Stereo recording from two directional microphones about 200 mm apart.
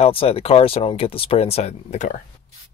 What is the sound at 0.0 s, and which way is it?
Speech, 30° left (ahead or behind).